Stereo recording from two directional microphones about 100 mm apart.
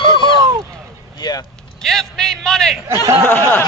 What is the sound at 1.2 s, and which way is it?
Vehicle, 45° left (ahead or behind).